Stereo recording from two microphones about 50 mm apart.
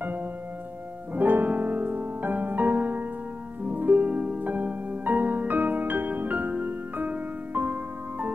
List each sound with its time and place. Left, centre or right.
1.1 s music: right